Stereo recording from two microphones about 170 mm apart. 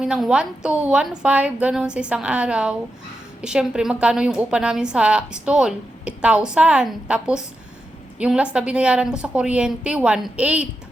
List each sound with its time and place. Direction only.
0.0 s a woman's voice: 5° right (ahead or behind)